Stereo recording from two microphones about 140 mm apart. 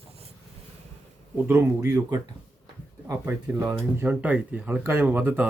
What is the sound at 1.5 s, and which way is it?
Speech, 20° right (ahead or behind).